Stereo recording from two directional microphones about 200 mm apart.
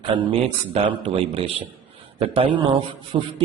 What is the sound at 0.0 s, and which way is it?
A man's voice, 25° right (ahead or behind).